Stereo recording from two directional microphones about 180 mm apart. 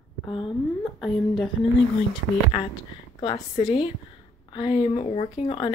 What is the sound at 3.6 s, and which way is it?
Speech, 25° left (ahead or behind).